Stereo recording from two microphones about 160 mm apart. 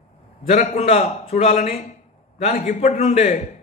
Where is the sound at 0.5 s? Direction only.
45° left (ahead or behind).